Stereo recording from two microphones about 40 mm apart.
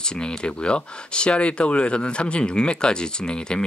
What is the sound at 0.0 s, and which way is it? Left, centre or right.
Speech, left.